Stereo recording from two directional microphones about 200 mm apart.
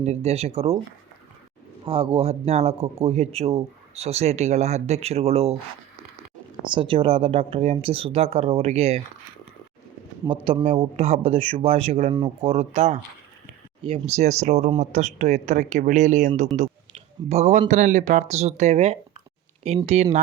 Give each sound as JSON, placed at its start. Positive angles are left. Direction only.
{"t": 0.0, "sound": "a man's voice", "side_deg": -35}
{"t": 1.8, "sound": "a man's voice", "side_deg": -25}
{"t": 6.6, "sound": "speech", "side_deg": -25}
{"t": 10.2, "sound": "a man's voice", "side_deg": -25}